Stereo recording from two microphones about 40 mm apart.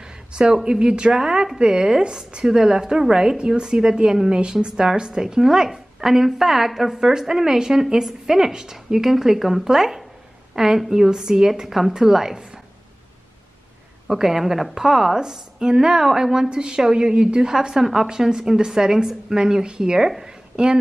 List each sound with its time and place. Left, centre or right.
0.0 s a sound: right
0.6 s a woman's voice: centre
14.0 s speech: centre
20.5 s speech: right